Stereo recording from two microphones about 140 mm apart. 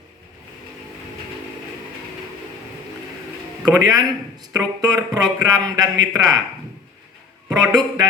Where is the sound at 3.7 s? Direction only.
25° right (ahead or behind).